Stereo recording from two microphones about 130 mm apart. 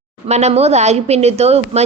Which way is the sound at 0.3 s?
55° right (ahead or behind).